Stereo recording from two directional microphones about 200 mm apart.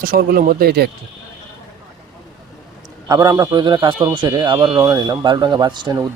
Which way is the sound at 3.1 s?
15° right (ahead or behind).